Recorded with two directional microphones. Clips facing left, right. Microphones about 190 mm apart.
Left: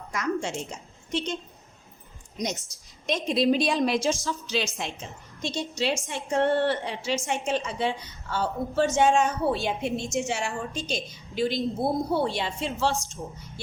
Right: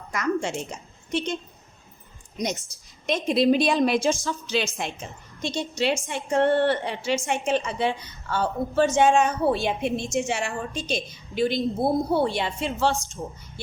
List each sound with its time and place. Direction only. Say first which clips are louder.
0.1 s a sound: right 3 dB; 60° right (ahead or behind)
1.1 s a woman's voice: right 2 dB; 55° right (ahead or behind)
2.4 s a woman's voice: right 2 dB; 60° right (ahead or behind)